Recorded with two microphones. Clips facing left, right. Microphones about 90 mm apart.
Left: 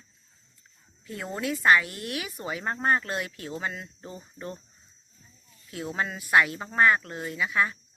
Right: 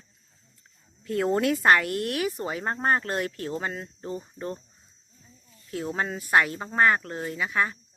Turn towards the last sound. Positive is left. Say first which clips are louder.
# even
turn(degrees=-35)  # may be behind; listen again after turning